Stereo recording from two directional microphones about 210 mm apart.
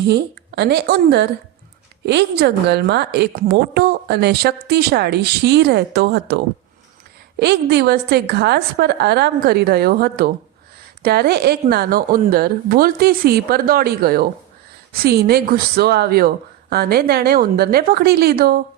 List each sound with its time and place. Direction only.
0.1 s a woman's voice: 55° right (ahead or behind)